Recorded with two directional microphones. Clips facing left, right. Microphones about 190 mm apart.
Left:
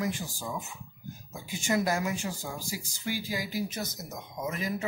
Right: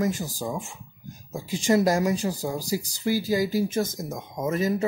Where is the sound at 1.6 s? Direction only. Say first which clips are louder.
Right 7 dB; 35° right (ahead or behind).